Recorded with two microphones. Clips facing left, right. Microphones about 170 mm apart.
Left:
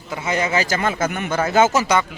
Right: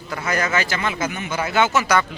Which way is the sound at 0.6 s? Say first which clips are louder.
Left 3 dB; 45° left (ahead or behind).